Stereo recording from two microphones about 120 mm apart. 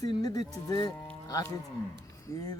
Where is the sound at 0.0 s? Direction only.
35° left (ahead or behind).